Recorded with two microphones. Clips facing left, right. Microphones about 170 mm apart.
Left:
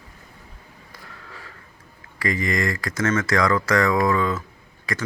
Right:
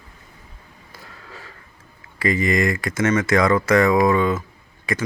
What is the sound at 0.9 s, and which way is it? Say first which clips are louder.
Sniff: right 2 dB; 25° right (ahead or behind).